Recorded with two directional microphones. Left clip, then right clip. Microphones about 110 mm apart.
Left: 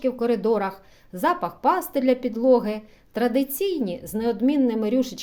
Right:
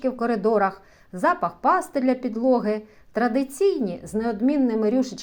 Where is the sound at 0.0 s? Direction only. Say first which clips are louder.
Even; 20° left (ahead or behind).